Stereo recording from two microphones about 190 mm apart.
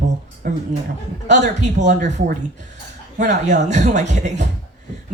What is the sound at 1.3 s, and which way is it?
A woman's voice, 40° right (ahead or behind).